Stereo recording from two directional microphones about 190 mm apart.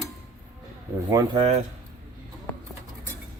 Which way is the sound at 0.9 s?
15° right (ahead or behind).